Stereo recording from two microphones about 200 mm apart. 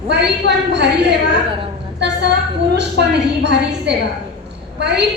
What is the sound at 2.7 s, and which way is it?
A woman's voice, 55° right (ahead or behind).